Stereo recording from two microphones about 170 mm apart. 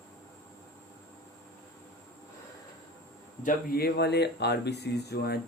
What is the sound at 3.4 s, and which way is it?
Speech, 65° left (ahead or behind).